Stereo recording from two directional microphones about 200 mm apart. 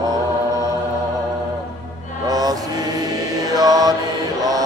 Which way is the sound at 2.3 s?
20° right (ahead or behind).